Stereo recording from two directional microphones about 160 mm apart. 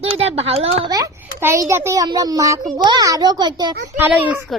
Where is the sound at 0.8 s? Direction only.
20° right (ahead or behind).